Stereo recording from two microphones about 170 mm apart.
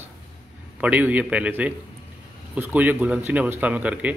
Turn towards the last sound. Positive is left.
turn(degrees=-10)  # may be behind; listen again after turning